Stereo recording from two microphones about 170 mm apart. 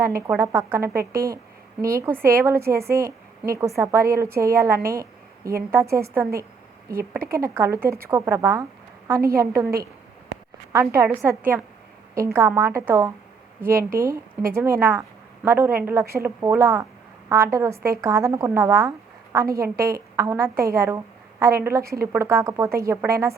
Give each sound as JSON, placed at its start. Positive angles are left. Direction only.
{"t": 0.2, "sound": "speech", "side_deg": -15}
{"t": 4.9, "sound": "a sound", "side_deg": -15}
{"t": 5.7, "sound": "speech", "side_deg": -15}
{"t": 7.2, "sound": "a woman's voice", "side_deg": -60}
{"t": 7.4, "sound": "speech", "side_deg": -15}
{"t": 10.9, "sound": "speech", "side_deg": -15}